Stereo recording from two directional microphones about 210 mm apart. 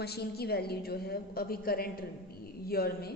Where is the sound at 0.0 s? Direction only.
50° left (ahead or behind).